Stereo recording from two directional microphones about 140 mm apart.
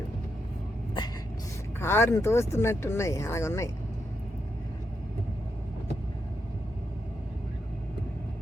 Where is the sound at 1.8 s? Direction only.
20° left (ahead or behind).